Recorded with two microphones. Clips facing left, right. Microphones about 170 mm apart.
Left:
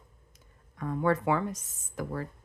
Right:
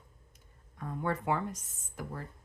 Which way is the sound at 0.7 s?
90° left.